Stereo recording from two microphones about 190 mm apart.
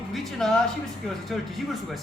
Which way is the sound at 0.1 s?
Centre (ahead or behind).